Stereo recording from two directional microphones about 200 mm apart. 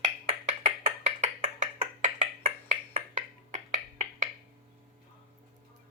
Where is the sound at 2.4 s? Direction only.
25° right (ahead or behind).